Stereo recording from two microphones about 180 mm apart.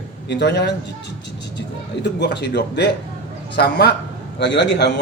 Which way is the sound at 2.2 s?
65° left (ahead or behind).